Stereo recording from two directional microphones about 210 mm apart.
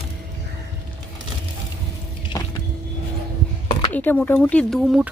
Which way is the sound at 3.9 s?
10° left (ahead or behind).